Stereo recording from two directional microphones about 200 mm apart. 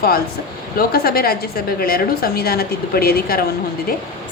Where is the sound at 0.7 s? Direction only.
50° left (ahead or behind).